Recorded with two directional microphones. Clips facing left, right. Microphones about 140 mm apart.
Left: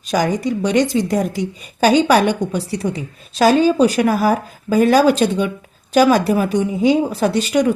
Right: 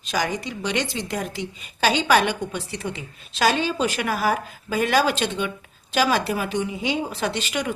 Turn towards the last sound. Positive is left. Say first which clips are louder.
# left 10 dB
turn(degrees=40)  # may be behind; listen again after turning